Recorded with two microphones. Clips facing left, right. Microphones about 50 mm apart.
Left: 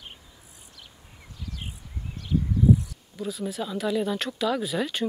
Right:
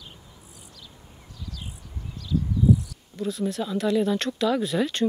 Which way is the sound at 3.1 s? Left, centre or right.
Centre.